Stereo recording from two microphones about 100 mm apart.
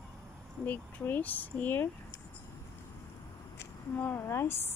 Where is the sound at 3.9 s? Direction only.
20° left (ahead or behind).